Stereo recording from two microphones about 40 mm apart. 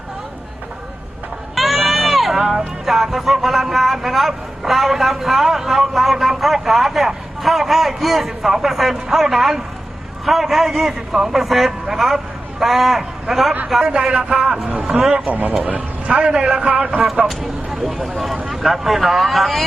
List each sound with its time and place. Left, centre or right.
1.5 s crowd: centre
2.4 s music: centre
2.8 s a man's voice: centre
13.8 s a man's voice: right; by 15.1 s centre
15.3 s a man's voice: right
16.0 s a man's voice: right
17.2 s a man's voice: centre